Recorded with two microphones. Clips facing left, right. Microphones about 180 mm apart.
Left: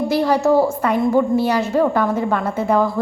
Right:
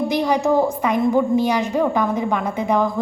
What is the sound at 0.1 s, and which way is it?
A woman's voice, 15° right (ahead or behind).